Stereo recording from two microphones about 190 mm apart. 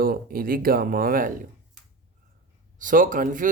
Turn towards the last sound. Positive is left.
turn(degrees=-45)  # may be behind; listen again after turning